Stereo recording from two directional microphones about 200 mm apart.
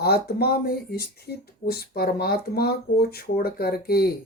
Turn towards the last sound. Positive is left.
turn(degrees=50)  # may be behind; listen again after turning